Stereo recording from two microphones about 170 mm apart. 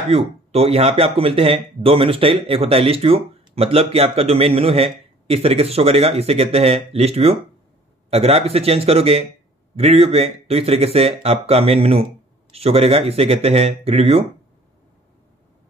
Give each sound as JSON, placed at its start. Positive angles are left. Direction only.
{"t": 0.1, "sound": "speech", "side_deg": -35}